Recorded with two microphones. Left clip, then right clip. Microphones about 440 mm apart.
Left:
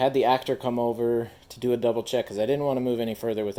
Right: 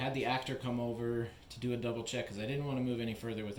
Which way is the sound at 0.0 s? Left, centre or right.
Centre.